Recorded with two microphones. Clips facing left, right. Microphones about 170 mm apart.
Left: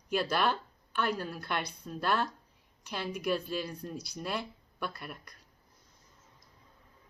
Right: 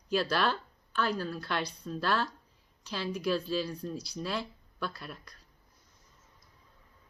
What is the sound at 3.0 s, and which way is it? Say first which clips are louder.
Speech: right 3 dB; 55° left (ahead or behind).